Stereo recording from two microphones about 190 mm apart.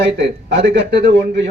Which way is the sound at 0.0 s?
65° right (ahead or behind).